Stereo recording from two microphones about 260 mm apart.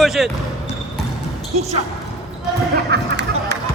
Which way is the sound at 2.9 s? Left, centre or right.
Right.